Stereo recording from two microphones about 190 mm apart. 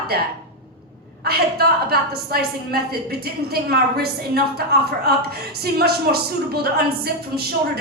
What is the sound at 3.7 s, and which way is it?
A woman's voice, 55° right (ahead or behind).